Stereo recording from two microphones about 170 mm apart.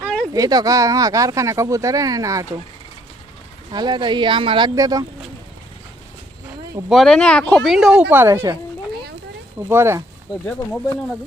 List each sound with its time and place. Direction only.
0.3 s speech: 20° right (ahead or behind)
3.7 s speech: 25° right (ahead or behind)
6.8 s a woman's voice: centre (ahead or behind); by 8.5 s 15° right (ahead or behind)
9.6 s a woman's voice: 15° right (ahead or behind)